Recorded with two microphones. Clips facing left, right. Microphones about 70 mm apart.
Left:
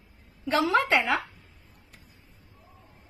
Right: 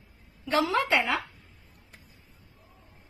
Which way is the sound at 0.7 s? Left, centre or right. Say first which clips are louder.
Left 2 dB; left.